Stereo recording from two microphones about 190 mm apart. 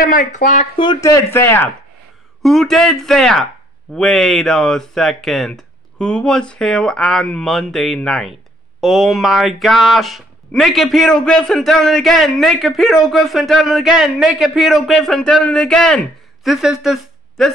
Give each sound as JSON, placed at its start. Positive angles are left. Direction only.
{"t": 0.1, "sound": "speech", "side_deg": 45}
{"t": 0.7, "sound": "speech", "side_deg": 20}
{"t": 2.4, "sound": "speech", "side_deg": 0}